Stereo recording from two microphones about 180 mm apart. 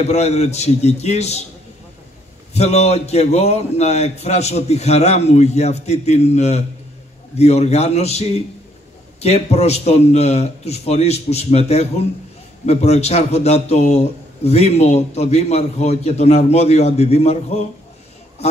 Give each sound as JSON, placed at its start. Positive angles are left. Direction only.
{"t": 0.1, "sound": "a man's voice", "side_deg": 35}
{"t": 2.5, "sound": "a man's voice", "side_deg": 35}